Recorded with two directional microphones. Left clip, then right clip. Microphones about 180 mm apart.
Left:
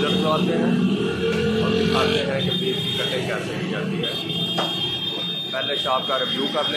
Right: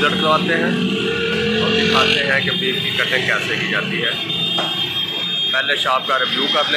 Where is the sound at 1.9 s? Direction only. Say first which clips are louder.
Right 7 dB; 65° left (ahead or behind).